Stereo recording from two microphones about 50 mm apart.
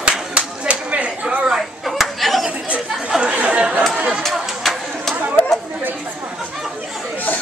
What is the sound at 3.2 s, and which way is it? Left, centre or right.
Chatter, right.